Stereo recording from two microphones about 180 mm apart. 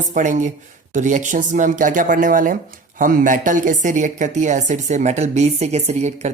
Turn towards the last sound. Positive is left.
turn(degrees=-40)  # may be behind; listen again after turning